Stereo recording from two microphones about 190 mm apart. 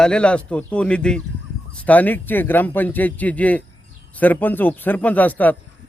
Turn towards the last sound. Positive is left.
turn(degrees=10)  # may be behind; listen again after turning